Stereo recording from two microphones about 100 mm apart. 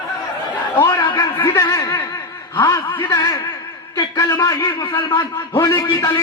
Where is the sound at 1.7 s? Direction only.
30° left (ahead or behind).